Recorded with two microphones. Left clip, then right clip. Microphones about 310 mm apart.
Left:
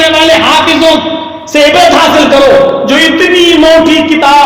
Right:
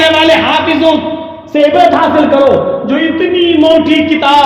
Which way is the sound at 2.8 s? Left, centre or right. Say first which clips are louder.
Left 6 dB; left.